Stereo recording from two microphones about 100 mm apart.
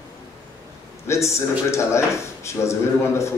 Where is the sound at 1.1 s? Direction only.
30° left (ahead or behind).